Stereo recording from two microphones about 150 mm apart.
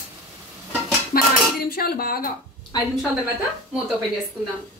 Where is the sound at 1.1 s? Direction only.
75° left (ahead or behind).